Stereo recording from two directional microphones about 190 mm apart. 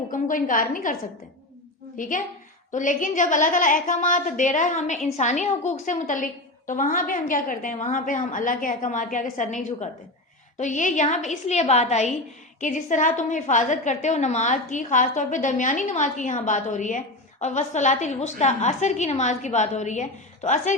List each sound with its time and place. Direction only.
0.1 s a woman's voice: 45° left (ahead or behind)
2.0 s a woman's voice: 45° left (ahead or behind)